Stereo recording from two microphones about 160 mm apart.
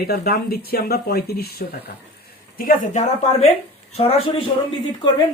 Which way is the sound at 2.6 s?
60° left (ahead or behind).